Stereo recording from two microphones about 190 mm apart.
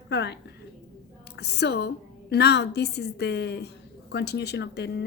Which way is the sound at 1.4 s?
60° left (ahead or behind).